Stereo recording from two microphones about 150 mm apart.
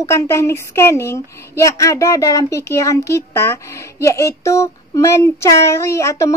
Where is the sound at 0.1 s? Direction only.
20° left (ahead or behind).